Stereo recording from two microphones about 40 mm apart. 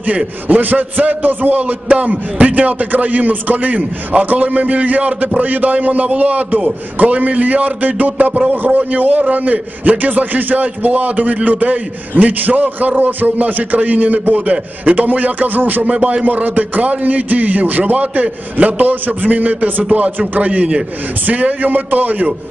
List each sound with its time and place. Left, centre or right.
0.6 s a man's voice: right
15.8 s a man's voice: right